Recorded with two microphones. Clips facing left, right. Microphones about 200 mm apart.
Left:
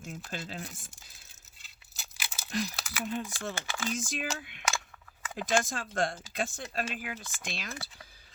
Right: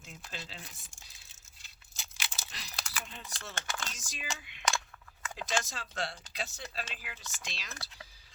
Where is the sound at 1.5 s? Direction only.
Centre (ahead or behind).